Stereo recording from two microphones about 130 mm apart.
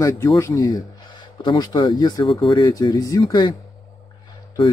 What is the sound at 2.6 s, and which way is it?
Speech, 25° left (ahead or behind).